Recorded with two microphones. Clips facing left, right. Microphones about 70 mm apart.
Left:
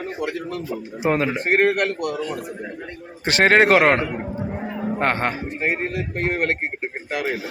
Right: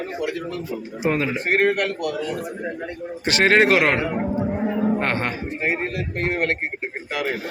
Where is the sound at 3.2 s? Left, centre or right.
Left.